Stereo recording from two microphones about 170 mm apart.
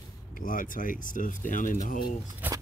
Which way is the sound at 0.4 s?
55° left (ahead or behind).